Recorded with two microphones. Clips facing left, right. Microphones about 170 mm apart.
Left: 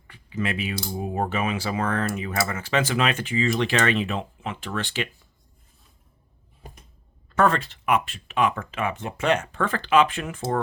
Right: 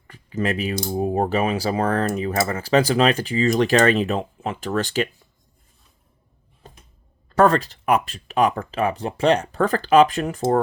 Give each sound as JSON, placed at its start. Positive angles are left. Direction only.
{"t": 0.1, "sound": "speech", "side_deg": -40}
{"t": 7.3, "sound": "speech", "side_deg": -40}